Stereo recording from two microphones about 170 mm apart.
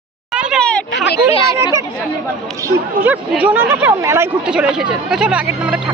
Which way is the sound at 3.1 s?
10° right (ahead or behind).